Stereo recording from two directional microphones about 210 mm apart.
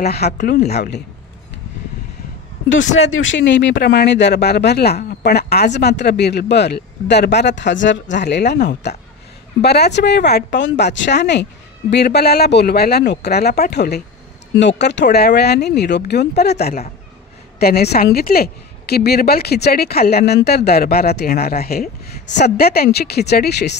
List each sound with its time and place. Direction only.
0.0 s a woman's voice: 50° left (ahead or behind)
3.1 s a woman's voice: 65° left (ahead or behind)